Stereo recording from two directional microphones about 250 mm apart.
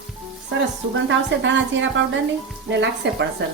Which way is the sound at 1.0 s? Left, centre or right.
Right.